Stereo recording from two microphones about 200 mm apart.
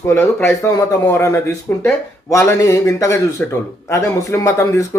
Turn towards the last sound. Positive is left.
turn(degrees=15)  # may be behind; listen again after turning